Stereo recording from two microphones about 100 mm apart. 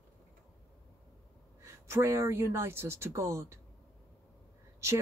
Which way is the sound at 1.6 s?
25° right (ahead or behind).